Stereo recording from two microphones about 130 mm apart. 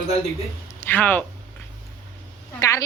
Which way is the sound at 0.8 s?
15° left (ahead or behind).